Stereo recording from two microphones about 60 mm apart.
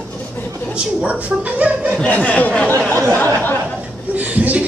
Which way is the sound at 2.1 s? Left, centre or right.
Left.